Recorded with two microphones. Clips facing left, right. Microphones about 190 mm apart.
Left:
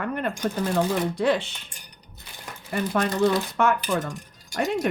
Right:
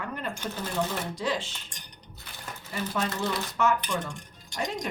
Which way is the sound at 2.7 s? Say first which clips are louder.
Left 7 dB; 60° left (ahead or behind).